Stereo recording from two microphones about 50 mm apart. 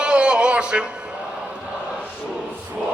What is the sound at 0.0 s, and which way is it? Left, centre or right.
Music, centre.